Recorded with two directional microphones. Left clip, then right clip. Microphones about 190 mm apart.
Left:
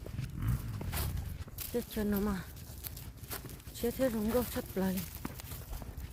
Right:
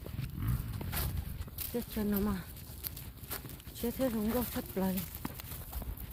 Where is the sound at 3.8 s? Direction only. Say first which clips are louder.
Left 2 dB; 20° left (ahead or behind).